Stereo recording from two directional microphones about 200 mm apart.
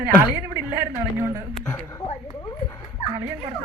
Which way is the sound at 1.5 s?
5° left (ahead or behind).